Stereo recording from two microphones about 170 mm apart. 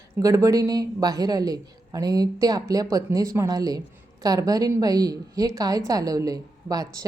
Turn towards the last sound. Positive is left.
turn(degrees=-20)  # may be behind; listen again after turning